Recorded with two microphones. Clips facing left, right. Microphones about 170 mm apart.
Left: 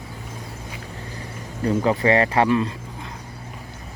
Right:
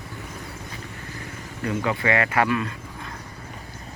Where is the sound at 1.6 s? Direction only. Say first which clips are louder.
Left 5 dB; 35° left (ahead or behind).